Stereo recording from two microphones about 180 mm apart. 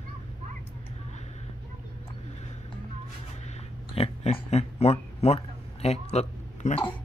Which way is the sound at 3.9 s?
35° left (ahead or behind).